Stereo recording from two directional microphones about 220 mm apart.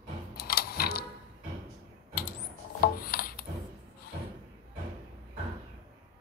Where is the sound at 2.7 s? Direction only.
40° left (ahead or behind).